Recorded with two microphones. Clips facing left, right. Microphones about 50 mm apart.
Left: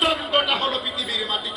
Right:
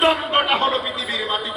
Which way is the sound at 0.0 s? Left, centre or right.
Right.